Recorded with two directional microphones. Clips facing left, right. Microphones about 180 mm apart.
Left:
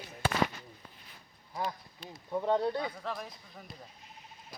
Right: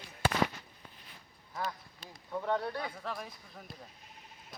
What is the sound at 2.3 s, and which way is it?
Speech, 20° left (ahead or behind).